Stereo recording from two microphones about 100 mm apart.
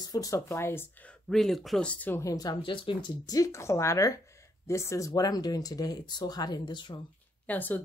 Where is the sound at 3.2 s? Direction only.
35° left (ahead or behind).